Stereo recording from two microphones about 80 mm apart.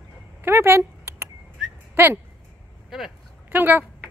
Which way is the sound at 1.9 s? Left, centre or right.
Right.